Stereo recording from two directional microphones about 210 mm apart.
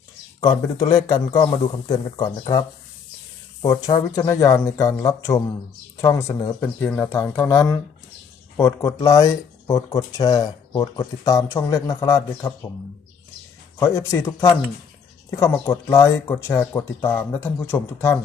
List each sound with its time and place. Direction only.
0.3 s speech: 20° left (ahead or behind)
13.7 s speech: 10° left (ahead or behind)